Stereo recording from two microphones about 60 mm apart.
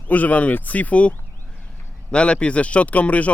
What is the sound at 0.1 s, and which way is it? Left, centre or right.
Speech, left.